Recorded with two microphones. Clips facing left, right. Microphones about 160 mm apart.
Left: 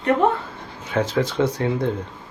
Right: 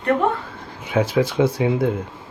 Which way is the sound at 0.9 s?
10° right (ahead or behind).